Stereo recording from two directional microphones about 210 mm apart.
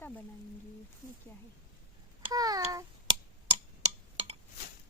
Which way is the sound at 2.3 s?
15° right (ahead or behind).